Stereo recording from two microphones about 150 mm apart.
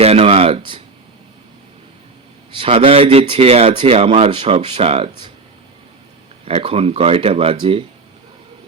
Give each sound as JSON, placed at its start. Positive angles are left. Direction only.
{"t": 0.0, "sound": "a sound", "side_deg": -40}
{"t": 2.6, "sound": "a man's voice", "side_deg": -40}
{"t": 6.4, "sound": "a man's voice", "side_deg": -40}